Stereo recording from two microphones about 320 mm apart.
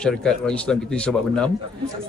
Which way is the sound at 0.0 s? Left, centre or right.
Centre.